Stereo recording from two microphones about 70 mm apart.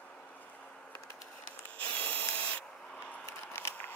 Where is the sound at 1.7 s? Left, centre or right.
Left.